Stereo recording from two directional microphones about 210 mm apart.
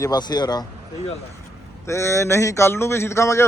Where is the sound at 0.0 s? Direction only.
20° left (ahead or behind).